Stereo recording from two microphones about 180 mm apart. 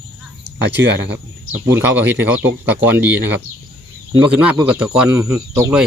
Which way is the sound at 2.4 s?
10° right (ahead or behind).